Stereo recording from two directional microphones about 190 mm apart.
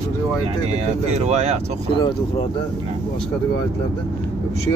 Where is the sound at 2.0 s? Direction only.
25° left (ahead or behind).